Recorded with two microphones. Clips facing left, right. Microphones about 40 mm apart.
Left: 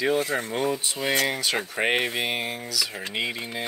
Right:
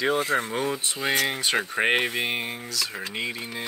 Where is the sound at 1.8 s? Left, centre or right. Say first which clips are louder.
Even; centre.